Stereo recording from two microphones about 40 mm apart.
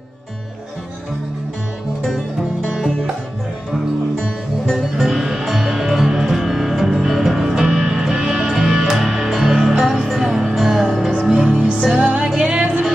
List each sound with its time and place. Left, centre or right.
4.6 s music: centre
11.5 s music: right
11.8 s music: centre
12.5 s music: right